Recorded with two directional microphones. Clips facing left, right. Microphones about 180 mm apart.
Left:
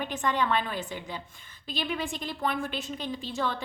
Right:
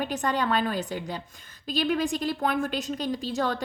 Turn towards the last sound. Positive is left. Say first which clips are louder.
# right 4 dB
turn(degrees=-40)  # may be behind; listen again after turning